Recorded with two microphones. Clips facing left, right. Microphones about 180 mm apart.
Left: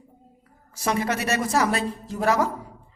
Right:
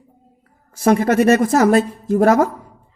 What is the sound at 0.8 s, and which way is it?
Speech, 50° right (ahead or behind).